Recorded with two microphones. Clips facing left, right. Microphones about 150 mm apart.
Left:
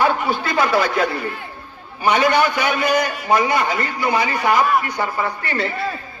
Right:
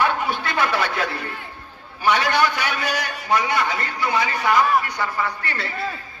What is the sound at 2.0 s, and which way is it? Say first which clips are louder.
Speech: left 3 dB; 15° left (ahead or behind).